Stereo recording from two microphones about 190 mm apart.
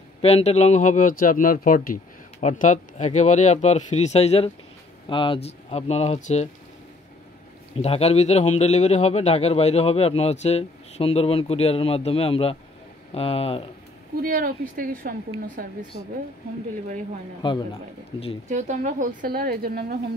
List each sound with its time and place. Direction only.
0.2 s a man's voice: 35° left (ahead or behind)
7.7 s a man's voice: 30° left (ahead or behind)
14.2 s a woman's voice: 50° right (ahead or behind)
17.4 s speech: 25° left (ahead or behind)
18.5 s a woman's voice: 40° right (ahead or behind)